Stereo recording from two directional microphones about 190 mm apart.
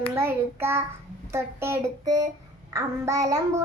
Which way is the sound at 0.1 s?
10° right (ahead or behind).